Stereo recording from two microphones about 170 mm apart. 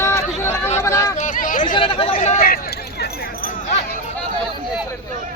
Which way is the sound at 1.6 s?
30° left (ahead or behind).